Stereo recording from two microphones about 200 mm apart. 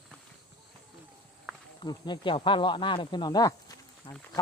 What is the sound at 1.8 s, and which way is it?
Speech, 20° left (ahead or behind).